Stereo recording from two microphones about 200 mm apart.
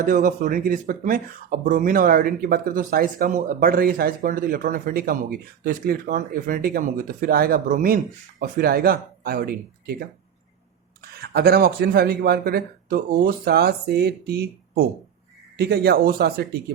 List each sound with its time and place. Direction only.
0.0 s speech: 40° right (ahead or behind)
11.2 s speech: 50° right (ahead or behind)